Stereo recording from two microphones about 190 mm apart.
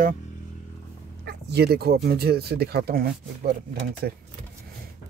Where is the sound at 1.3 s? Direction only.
60° right (ahead or behind).